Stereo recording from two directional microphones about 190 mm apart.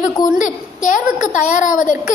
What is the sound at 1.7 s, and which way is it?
Speech, 45° left (ahead or behind).